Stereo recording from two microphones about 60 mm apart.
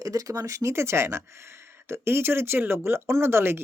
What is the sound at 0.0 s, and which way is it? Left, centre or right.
Speech, right.